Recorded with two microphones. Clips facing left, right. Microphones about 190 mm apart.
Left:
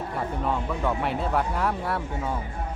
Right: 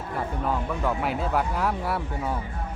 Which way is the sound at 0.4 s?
Centre (ahead or behind).